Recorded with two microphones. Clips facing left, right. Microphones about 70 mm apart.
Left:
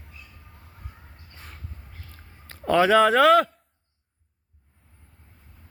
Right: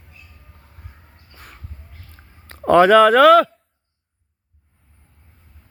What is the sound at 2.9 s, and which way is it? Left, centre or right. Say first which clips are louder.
Speech: right 5 dB; right.